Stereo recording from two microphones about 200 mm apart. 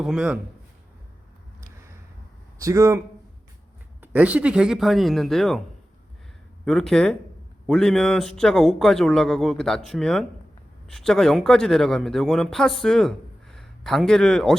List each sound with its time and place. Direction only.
0.0 s a man's voice: 5° right (ahead or behind)
2.6 s speech: 15° right (ahead or behind)
4.0 s a man's voice: 5° right (ahead or behind)
6.7 s a man's voice: centre (ahead or behind)